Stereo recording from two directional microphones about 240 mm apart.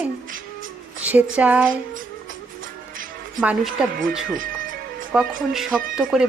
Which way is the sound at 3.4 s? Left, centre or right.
Centre.